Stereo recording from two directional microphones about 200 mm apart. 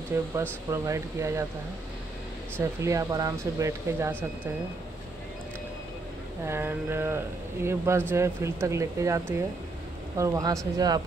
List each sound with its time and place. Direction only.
0.1 s speech: 15° right (ahead or behind)
2.6 s speech: 15° right (ahead or behind)
6.4 s speech: 10° right (ahead or behind)